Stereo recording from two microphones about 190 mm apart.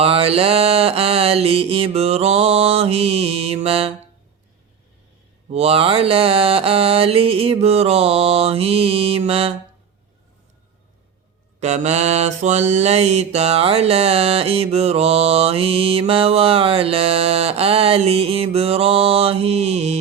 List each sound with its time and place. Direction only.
0.0 s mantra: 30° right (ahead or behind)
5.5 s mantra: 30° right (ahead or behind)
11.6 s mantra: 35° right (ahead or behind)